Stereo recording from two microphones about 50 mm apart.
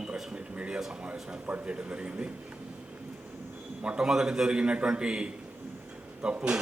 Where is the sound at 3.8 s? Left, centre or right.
Centre.